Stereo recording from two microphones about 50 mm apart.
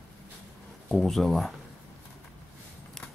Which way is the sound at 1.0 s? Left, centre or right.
Centre.